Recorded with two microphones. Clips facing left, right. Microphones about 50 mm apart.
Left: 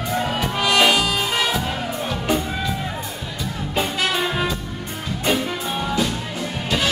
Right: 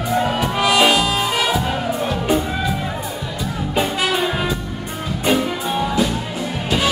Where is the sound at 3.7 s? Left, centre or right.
Centre.